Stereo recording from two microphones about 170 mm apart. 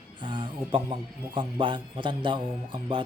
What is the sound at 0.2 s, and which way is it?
Speech, 30° right (ahead or behind).